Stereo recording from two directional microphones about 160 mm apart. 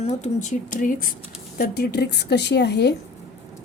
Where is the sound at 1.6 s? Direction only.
75° left (ahead or behind); by 3.0 s 90° left.